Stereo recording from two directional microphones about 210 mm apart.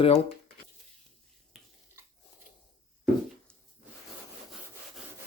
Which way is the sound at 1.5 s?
Centre (ahead or behind).